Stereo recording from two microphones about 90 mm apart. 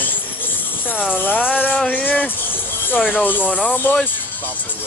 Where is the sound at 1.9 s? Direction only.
20° left (ahead or behind).